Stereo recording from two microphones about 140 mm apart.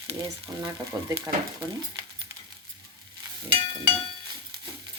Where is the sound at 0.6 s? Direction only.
25° right (ahead or behind).